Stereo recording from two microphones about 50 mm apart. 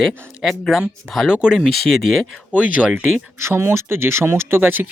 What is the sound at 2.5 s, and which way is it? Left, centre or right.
Speech, right.